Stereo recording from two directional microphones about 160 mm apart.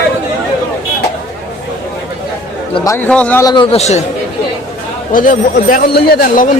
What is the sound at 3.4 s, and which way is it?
Speech, 30° left (ahead or behind).